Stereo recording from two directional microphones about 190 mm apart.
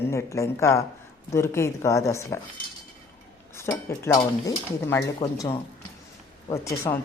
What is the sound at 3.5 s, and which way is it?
Cutlery, 15° left (ahead or behind).